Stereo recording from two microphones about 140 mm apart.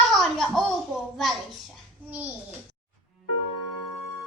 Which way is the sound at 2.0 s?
10° right (ahead or behind).